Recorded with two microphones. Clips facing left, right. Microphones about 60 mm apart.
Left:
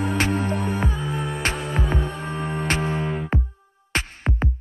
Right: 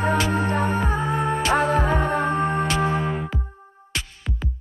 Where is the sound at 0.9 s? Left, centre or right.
Right.